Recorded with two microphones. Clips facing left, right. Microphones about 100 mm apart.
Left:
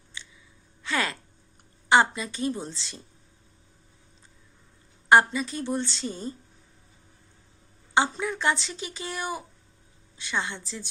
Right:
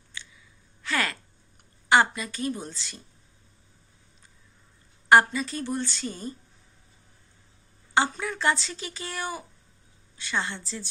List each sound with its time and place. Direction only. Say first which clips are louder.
0.1 s a sound: right 1 dB; 20° left (ahead or behind)
1.9 s a woman's voice: left 1 dB; 20° left (ahead or behind)
5.0 s a woman's voice: even; 20° left (ahead or behind)
7.9 s speech: left 1 dB; 20° left (ahead or behind)